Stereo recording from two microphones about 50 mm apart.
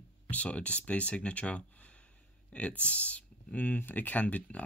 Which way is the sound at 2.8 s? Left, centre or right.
Left.